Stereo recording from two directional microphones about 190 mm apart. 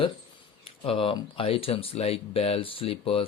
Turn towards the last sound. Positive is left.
turn(degrees=30)  # may be behind; listen again after turning